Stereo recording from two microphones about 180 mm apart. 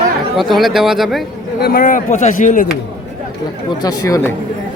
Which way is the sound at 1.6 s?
50° left (ahead or behind).